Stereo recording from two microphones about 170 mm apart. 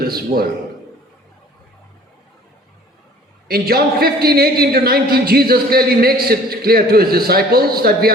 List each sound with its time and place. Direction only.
0.0 s a man's voice: 65° right (ahead or behind)
3.5 s a man's voice: 65° right (ahead or behind)